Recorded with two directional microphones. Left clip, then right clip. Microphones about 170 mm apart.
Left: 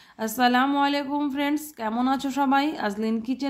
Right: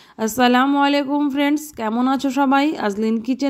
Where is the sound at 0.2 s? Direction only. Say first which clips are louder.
Right 5 dB; 35° right (ahead or behind).